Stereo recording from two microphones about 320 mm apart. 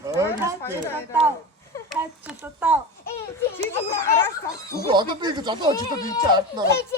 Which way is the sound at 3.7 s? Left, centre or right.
Centre.